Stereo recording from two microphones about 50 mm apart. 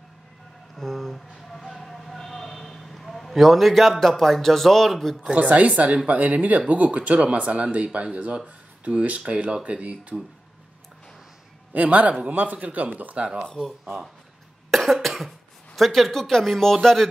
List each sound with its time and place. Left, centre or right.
0.7 s a sound: centre
5.3 s speech: right
11.7 s speech: right
14.7 s speech: centre